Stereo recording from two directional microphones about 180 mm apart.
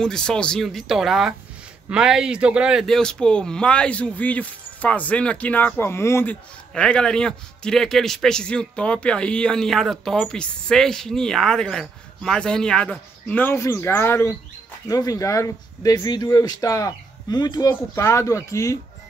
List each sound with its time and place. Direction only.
0.0 s speech: 5° left (ahead or behind)